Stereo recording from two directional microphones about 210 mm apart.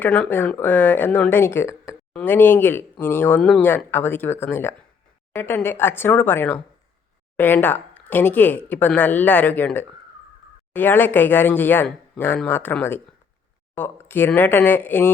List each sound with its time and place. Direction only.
0.0 s speech: 5° left (ahead or behind)